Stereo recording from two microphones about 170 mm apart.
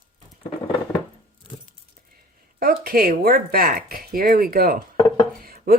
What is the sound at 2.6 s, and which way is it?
Speech, 60° right (ahead or behind).